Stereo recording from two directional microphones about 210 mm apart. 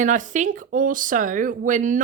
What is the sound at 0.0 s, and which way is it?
Speech, 40° right (ahead or behind).